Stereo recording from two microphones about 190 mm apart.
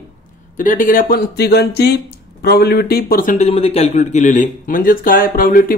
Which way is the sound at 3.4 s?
30° left (ahead or behind).